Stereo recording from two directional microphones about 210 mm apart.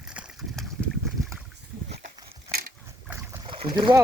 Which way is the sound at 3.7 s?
20° right (ahead or behind).